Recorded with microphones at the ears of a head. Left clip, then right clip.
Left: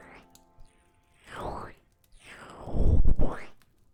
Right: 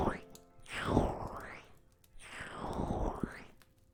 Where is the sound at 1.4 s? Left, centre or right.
Left.